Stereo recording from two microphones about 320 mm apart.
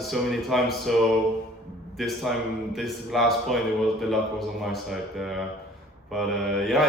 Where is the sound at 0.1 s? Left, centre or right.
Centre.